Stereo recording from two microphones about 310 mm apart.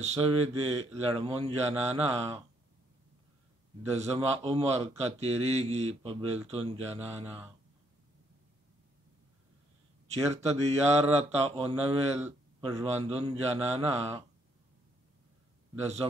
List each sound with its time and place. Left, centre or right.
0.0 s speech: centre
3.9 s speech: centre
10.0 s speech: right